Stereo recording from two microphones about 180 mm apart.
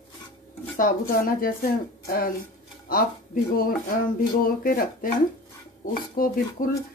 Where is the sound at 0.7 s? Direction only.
50° left (ahead or behind).